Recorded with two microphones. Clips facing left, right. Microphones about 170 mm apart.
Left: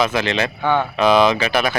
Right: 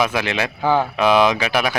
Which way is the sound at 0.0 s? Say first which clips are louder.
Left 1 dB; 10° right (ahead or behind).